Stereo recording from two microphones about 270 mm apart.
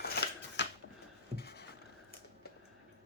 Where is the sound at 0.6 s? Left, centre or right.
Left.